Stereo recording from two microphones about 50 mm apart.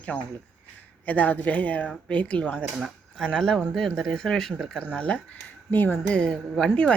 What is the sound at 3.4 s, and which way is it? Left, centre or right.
Speech, centre.